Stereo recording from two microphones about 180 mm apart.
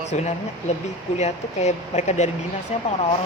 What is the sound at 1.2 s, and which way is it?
Speech, 40° left (ahead or behind).